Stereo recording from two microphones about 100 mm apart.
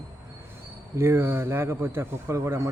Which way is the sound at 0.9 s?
25° right (ahead or behind).